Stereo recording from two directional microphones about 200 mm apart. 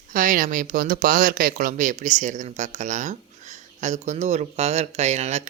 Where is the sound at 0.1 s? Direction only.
45° right (ahead or behind).